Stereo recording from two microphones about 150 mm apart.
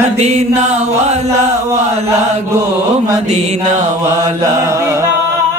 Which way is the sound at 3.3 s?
50° right (ahead or behind).